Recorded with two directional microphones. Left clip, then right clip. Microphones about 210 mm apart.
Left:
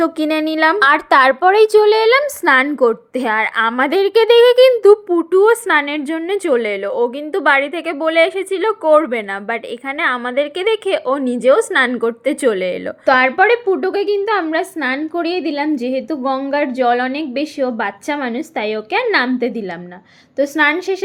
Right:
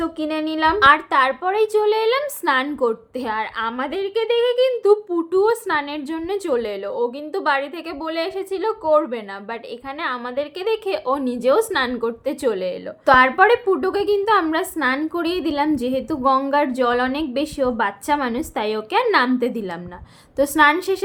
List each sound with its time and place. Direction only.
0.0 s a woman's voice: 30° left (ahead or behind)
0.8 s a woman's voice: 40° left (ahead or behind)
4.7 s a woman's voice: 35° left (ahead or behind)
13.1 s a woman's voice: 10° left (ahead or behind)